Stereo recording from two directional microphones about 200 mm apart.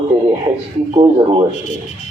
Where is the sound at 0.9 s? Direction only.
25° right (ahead or behind).